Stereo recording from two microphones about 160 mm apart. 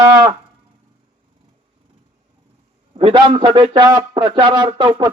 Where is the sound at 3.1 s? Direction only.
30° right (ahead or behind).